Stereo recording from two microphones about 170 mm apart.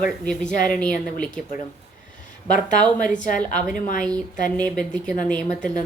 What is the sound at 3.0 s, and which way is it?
Speech, 50° left (ahead or behind).